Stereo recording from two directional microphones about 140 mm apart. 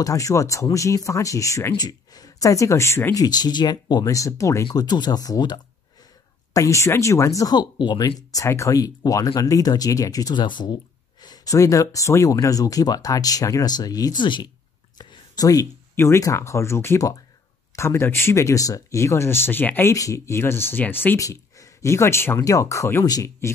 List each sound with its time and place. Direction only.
0.0 s speech: 25° left (ahead or behind)
3.3 s speech: 30° left (ahead or behind)